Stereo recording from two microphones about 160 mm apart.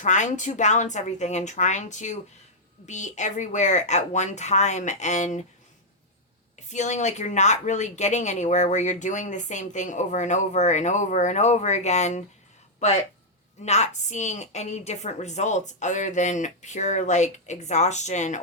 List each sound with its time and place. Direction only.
0.0 s speech: 50° left (ahead or behind)
6.7 s speech: 45° left (ahead or behind)